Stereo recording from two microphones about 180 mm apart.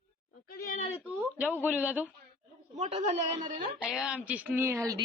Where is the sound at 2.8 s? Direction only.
35° right (ahead or behind).